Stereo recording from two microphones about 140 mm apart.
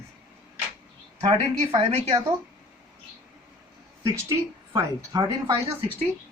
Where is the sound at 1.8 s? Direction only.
50° right (ahead or behind).